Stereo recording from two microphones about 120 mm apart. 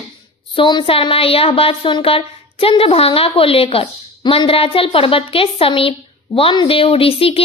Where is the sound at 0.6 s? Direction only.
40° left (ahead or behind).